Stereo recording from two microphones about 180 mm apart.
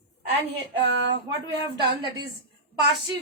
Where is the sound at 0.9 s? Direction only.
80° right.